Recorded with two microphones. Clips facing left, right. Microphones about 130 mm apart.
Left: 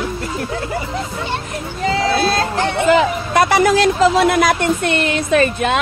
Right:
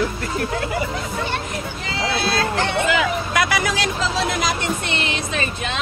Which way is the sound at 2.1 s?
40° left (ahead or behind).